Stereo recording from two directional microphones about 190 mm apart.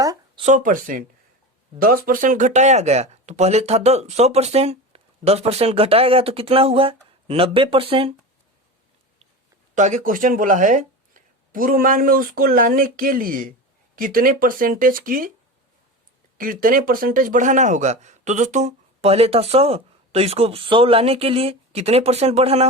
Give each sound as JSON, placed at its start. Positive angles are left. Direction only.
{"t": 0.0, "sound": "a sound", "side_deg": -20}
{"t": 0.4, "sound": "speech", "side_deg": -45}
{"t": 9.7, "sound": "speech", "side_deg": -40}
{"t": 16.4, "sound": "speech", "side_deg": -45}